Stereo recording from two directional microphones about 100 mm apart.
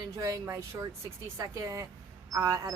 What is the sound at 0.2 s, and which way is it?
A woman's voice, 30° right (ahead or behind).